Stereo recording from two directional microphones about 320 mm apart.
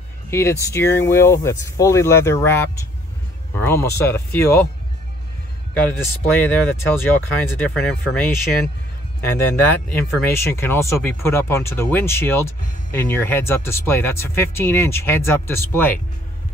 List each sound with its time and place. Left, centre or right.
0.3 s speech: centre
5.8 s speech: centre
10.3 s speech: centre